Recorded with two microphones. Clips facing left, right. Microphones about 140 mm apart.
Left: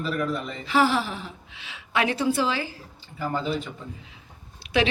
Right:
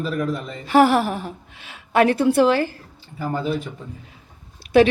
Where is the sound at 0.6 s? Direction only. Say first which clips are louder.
Right 7 dB; 55° right (ahead or behind).